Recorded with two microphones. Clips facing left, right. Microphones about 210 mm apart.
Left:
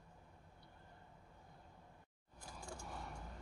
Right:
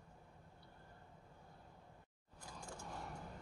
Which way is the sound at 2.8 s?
Centre (ahead or behind).